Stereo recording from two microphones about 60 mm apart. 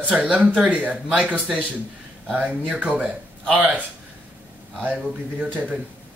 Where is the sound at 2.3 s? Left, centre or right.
Right.